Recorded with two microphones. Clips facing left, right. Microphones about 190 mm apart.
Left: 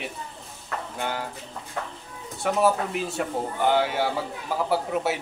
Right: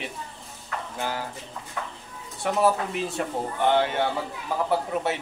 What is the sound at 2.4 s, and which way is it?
A man's voice, centre (ahead or behind).